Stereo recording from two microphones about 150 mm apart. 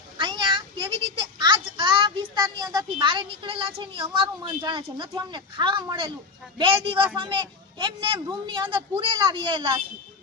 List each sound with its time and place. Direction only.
0.2 s a child's voice: 30° right (ahead or behind)